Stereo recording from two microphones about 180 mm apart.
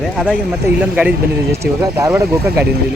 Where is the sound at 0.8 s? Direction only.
5° right (ahead or behind).